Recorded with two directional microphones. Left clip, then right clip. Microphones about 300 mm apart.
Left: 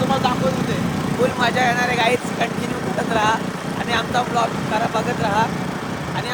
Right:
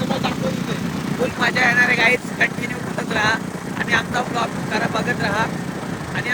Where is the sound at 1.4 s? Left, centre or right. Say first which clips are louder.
Right 5 dB; centre.